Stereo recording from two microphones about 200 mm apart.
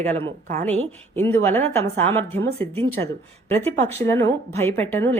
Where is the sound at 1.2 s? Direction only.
10° left (ahead or behind).